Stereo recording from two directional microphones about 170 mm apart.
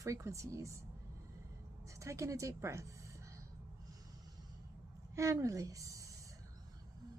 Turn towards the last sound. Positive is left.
turn(degrees=-20)  # may be behind; listen again after turning